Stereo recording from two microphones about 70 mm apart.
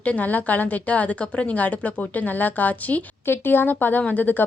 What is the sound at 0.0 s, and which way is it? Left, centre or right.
A woman's voice, left.